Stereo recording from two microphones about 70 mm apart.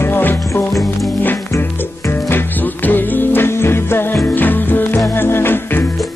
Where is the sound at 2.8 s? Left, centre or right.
Left.